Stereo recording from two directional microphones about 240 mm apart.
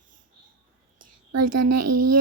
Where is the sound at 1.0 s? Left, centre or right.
Right.